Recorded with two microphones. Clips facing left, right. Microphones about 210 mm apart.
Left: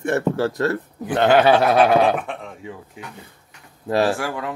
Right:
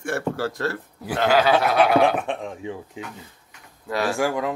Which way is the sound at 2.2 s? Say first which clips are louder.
Right 3 dB; 15° right (ahead or behind).